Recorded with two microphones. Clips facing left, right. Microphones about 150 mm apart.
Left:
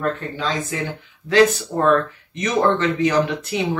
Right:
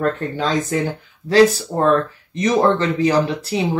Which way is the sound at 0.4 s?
40° right (ahead or behind).